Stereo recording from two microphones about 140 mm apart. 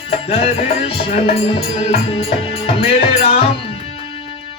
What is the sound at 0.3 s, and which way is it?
Music, 40° left (ahead or behind).